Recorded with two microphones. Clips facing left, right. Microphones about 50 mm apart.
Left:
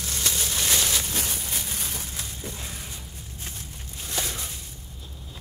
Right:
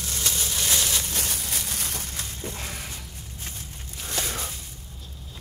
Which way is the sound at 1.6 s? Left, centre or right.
Right.